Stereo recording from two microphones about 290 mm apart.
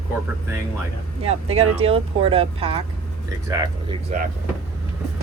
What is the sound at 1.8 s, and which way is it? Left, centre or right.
Speech, centre.